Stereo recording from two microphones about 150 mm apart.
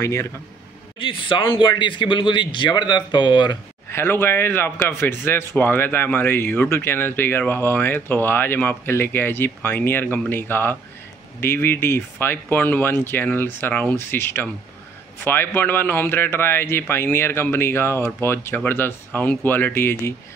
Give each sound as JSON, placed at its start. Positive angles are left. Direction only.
{"t": 0.0, "sound": "speech", "side_deg": 20}
{"t": 0.9, "sound": "speech", "side_deg": 35}
{"t": 3.9, "sound": "a man's voice", "side_deg": 15}